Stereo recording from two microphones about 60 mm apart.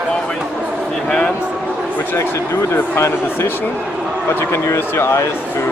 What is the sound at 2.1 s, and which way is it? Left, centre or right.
A man's voice, left.